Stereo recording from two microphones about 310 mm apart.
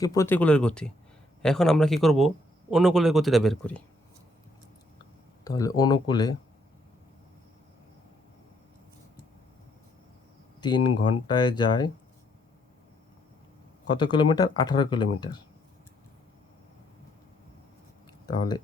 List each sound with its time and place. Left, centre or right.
0.0 s a man's voice: centre
5.5 s speech: centre
10.8 s speech: left
11.3 s speech: centre
13.9 s speech: centre
18.3 s speech: centre